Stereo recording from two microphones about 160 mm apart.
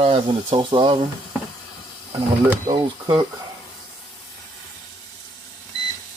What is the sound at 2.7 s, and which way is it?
Speech, 25° right (ahead or behind).